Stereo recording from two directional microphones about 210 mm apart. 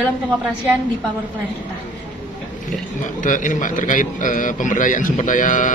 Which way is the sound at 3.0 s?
40° left (ahead or behind).